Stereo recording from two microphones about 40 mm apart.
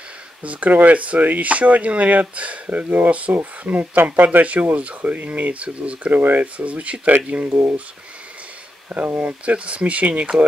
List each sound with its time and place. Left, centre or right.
0.4 s speech: right
3.6 s speech: right
6.1 s speech: right
6.4 s speech: right
8.8 s speech: right
9.5 s speech: right